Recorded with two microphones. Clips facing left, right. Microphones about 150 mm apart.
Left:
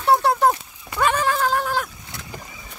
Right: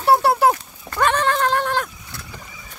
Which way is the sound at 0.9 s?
5° left (ahead or behind).